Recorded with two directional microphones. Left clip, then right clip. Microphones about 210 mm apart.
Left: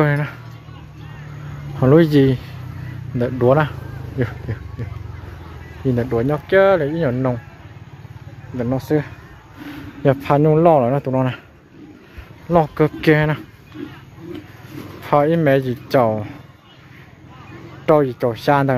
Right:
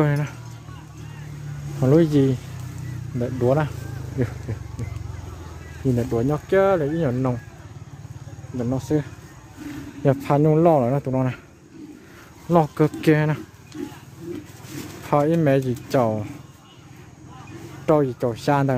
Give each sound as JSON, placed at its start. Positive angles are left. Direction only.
{"t": 0.0, "sound": "speech", "side_deg": 0}
{"t": 1.8, "sound": "speech", "side_deg": 0}
{"t": 4.5, "sound": "speech", "side_deg": -10}
{"t": 5.9, "sound": "speech", "side_deg": -5}
{"t": 8.5, "sound": "speech", "side_deg": 0}
{"t": 10.0, "sound": "speech", "side_deg": -5}
{"t": 12.4, "sound": "speech", "side_deg": -10}
{"t": 13.8, "sound": "a sound", "side_deg": -45}
{"t": 15.0, "sound": "speech", "side_deg": -5}
{"t": 17.8, "sound": "speech", "side_deg": -5}